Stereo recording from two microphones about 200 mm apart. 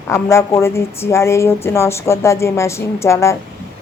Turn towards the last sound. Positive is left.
turn(degrees=15)  # may be behind; listen again after turning